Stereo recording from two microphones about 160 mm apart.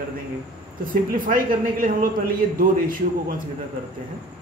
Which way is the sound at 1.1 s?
60° right (ahead or behind).